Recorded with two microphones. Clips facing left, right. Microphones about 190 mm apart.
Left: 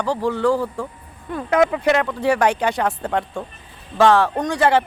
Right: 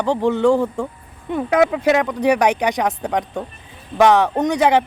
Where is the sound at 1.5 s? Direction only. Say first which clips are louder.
Right 1 dB; 5° right (ahead or behind).